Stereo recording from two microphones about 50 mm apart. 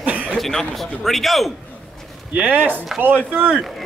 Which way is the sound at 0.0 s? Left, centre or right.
Right.